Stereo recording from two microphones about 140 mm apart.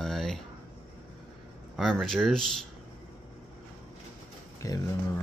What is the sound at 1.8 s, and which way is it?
Speech, centre (ahead or behind).